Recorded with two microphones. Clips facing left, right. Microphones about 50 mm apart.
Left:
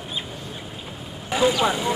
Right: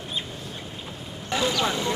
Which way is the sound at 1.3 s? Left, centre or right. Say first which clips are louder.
Left 5 dB; centre.